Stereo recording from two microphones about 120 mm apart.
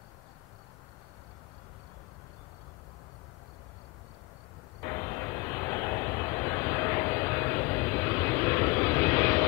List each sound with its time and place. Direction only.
4.8 s vehicle: 25° left (ahead or behind)